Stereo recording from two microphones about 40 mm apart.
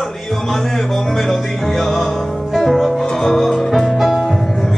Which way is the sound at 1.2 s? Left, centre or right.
Centre.